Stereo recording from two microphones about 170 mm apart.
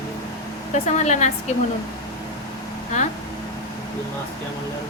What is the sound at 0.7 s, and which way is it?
Speech, 45° left (ahead or behind).